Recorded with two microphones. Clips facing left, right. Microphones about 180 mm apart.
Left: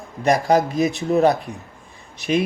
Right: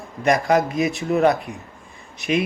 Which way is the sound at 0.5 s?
Centre (ahead or behind).